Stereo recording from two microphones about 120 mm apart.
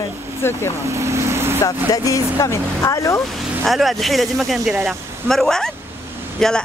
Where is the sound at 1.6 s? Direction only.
25° left (ahead or behind).